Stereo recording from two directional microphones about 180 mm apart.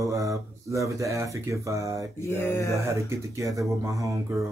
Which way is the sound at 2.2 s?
15° left (ahead or behind).